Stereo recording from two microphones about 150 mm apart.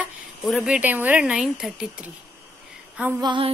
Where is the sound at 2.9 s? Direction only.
15° right (ahead or behind).